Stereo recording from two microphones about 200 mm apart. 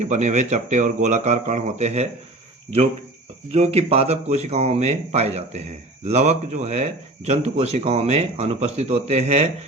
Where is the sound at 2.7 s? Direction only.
20° right (ahead or behind).